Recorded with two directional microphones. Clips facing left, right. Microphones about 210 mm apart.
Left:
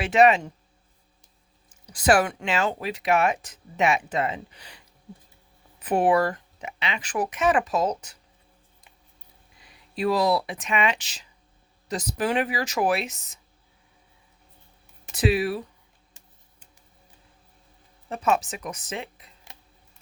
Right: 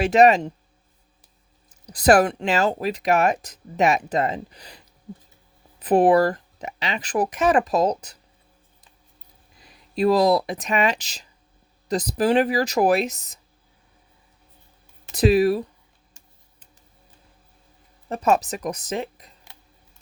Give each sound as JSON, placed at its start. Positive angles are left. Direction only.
{"t": 0.0, "sound": "speech", "side_deg": -40}
{"t": 1.7, "sound": "speech", "side_deg": -35}
{"t": 5.8, "sound": "speech", "side_deg": -35}
{"t": 9.6, "sound": "speech", "side_deg": -40}
{"t": 15.1, "sound": "speech", "side_deg": -40}
{"t": 18.1, "sound": "speech", "side_deg": -40}